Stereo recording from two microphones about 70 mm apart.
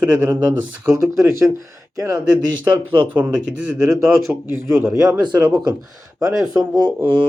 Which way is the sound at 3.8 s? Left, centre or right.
Right.